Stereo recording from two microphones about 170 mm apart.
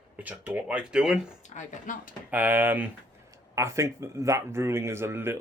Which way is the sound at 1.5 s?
50° left (ahead or behind).